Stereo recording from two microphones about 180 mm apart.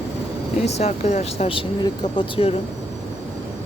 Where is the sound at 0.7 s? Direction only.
35° left (ahead or behind).